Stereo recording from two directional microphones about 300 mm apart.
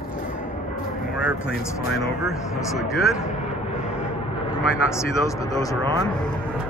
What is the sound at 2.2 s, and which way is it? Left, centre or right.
Speech, centre.